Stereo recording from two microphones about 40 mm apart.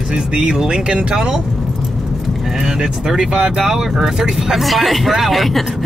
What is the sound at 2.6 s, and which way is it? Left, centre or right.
Speech, centre.